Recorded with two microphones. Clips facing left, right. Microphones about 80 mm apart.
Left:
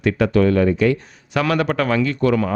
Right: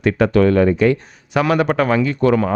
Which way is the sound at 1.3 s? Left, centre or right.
Centre.